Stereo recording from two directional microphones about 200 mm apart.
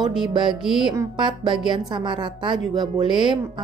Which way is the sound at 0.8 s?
25° right (ahead or behind).